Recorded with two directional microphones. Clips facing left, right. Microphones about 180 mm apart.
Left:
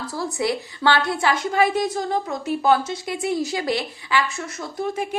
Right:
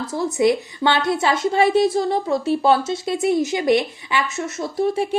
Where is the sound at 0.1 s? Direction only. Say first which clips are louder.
Right 7 dB; 20° right (ahead or behind).